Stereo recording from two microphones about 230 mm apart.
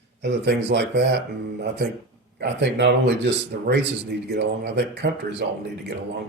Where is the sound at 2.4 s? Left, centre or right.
Right.